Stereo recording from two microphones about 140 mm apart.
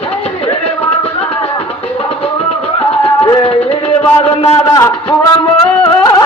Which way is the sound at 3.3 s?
40° left (ahead or behind).